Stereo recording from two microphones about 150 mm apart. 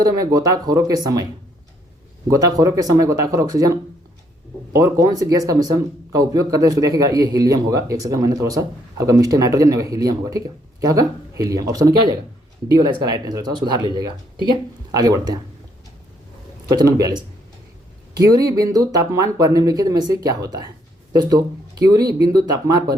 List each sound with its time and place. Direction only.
0.0 s speech: 25° right (ahead or behind)
4.8 s speech: 25° right (ahead or behind)
16.6 s speech: 25° right (ahead or behind)